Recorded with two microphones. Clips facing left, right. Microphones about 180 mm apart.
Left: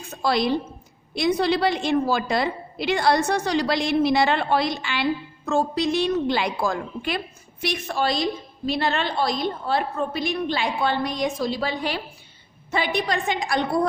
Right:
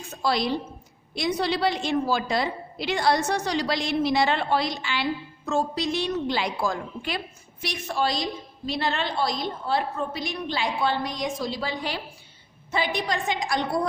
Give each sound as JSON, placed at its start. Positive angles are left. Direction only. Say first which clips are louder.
{"t": 0.1, "sound": "a woman's voice", "louder": "left 3 dB", "side_deg": 55}